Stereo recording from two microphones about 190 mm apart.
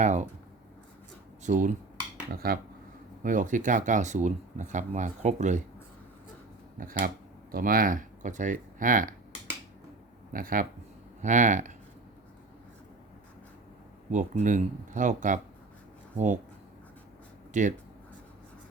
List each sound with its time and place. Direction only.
0.0 s writing: 40° right (ahead or behind)
1.5 s speech: 40° right (ahead or behind)
6.7 s speech: 45° right (ahead or behind)
10.3 s speech: 45° right (ahead or behind)
14.1 s speech: 40° right (ahead or behind)
17.5 s speech: 40° right (ahead or behind)